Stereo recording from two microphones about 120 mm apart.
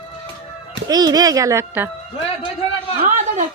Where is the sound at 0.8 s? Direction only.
35° right (ahead or behind).